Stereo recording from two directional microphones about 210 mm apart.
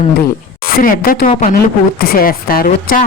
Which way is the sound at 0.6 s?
40° left (ahead or behind).